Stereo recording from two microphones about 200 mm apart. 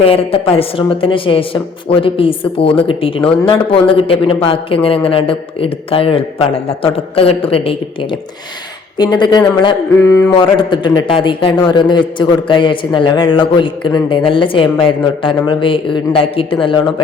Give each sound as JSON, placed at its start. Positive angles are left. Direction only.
{"t": 0.0, "sound": "a man's voice", "side_deg": 30}
{"t": 10.0, "sound": "a sound", "side_deg": 15}
{"t": 10.6, "sound": "a man's voice", "side_deg": 25}